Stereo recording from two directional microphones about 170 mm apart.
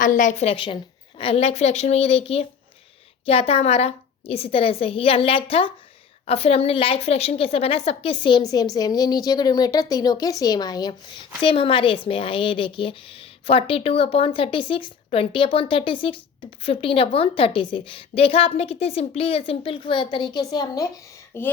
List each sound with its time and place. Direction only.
0.0 s a woman's voice: 50° left (ahead or behind); by 21.5 s 15° left (ahead or behind)